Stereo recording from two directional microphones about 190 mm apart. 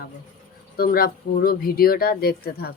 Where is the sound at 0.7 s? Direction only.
50° left (ahead or behind).